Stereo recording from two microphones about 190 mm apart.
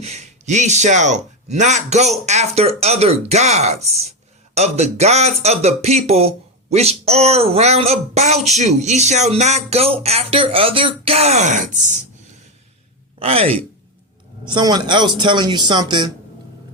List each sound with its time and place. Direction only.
0.0 s speech: 35° right (ahead or behind)
13.1 s speech: 30° right (ahead or behind)